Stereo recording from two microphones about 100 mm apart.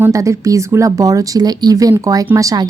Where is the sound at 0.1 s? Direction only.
35° right (ahead or behind).